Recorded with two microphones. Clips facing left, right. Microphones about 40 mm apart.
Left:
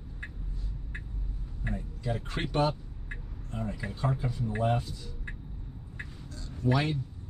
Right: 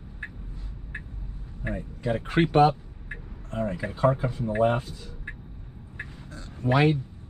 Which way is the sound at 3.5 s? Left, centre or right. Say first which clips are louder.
Right 7 dB; right.